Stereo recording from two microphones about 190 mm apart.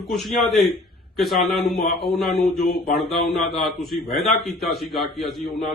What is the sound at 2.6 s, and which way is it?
Mantra, 55° left (ahead or behind).